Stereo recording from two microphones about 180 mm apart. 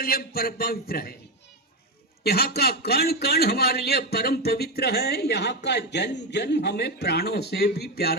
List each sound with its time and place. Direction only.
0.0 s a man's voice: 55° left (ahead or behind)
2.2 s a man's voice: 60° left (ahead or behind)